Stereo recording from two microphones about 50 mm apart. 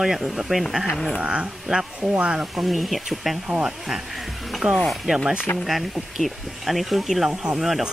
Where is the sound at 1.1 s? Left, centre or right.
Centre.